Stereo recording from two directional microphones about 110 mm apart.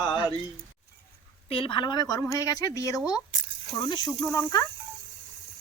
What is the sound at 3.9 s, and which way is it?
Mantra, 40° left (ahead or behind).